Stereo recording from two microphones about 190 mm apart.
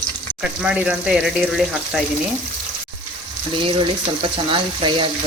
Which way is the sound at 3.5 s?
25° right (ahead or behind).